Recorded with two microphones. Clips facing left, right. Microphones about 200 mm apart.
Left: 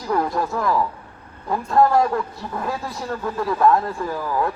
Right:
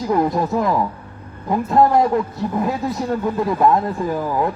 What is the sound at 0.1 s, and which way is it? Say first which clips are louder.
A man's voice: right 3 dB; 20° right (ahead or behind).